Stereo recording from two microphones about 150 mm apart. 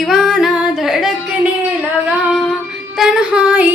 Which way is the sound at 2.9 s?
5° right (ahead or behind).